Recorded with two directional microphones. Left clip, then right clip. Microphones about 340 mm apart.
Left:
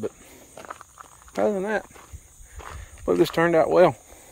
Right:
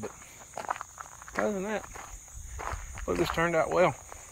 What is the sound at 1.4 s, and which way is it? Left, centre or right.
Speech, centre.